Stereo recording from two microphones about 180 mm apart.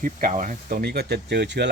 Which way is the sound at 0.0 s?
45° right (ahead or behind).